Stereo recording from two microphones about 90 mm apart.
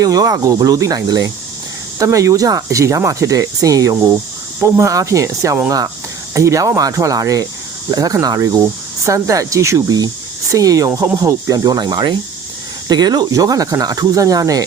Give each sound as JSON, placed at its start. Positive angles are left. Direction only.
{"t": 0.0, "sound": "speech", "side_deg": -45}
{"t": 2.0, "sound": "speech", "side_deg": -35}